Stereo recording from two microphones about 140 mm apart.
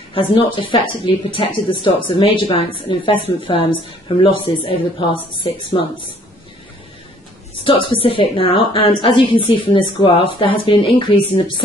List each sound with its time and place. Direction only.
0.1 s a woman's voice: 35° left (ahead or behind)
7.6 s a woman's voice: 40° left (ahead or behind)